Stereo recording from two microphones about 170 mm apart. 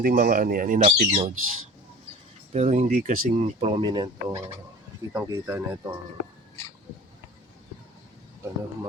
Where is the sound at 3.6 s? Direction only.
30° right (ahead or behind).